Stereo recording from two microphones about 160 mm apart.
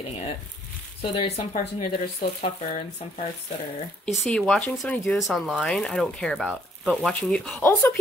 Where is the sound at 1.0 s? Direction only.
35° left (ahead or behind).